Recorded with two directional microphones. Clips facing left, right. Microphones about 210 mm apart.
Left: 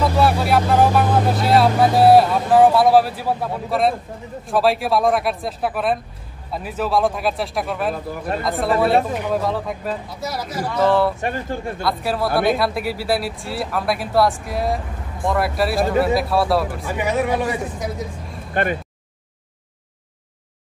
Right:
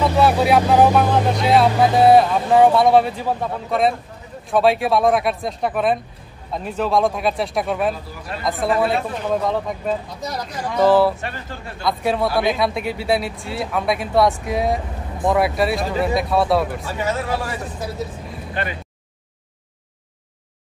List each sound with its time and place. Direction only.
0.2 s speech: centre (ahead or behind)
16.8 s speech: 15° left (ahead or behind)
18.5 s speech: 50° left (ahead or behind)